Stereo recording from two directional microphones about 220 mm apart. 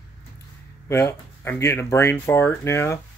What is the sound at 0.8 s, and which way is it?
Speech, 10° left (ahead or behind).